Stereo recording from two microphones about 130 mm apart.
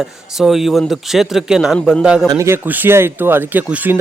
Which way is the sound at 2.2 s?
25° right (ahead or behind).